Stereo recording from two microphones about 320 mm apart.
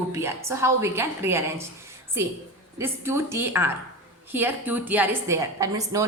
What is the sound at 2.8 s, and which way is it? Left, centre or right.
A woman's voice, centre.